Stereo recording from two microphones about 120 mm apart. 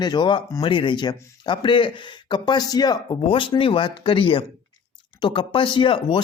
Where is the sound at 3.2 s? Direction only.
45° left (ahead or behind).